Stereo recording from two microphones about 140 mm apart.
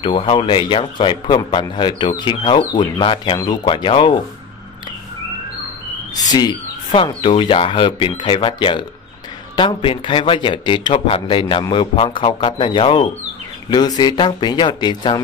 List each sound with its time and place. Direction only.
0.0 s speech: 35° left (ahead or behind)
6.1 s speech: 30° left (ahead or behind)